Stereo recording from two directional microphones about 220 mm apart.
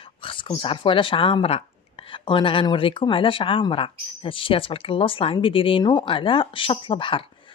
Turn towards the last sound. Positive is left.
turn(degrees=25)  # may be behind; listen again after turning